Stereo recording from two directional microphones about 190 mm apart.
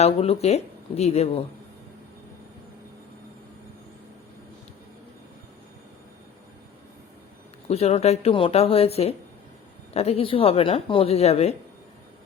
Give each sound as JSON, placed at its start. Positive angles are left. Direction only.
{"t": 0.0, "sound": "a woman's voice", "side_deg": 30}
{"t": 7.7, "sound": "a woman's voice", "side_deg": 30}